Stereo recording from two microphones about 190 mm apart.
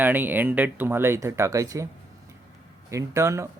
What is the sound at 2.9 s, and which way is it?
Speech, 15° right (ahead or behind).